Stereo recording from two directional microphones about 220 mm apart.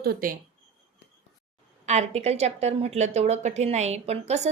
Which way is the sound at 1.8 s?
30° right (ahead or behind).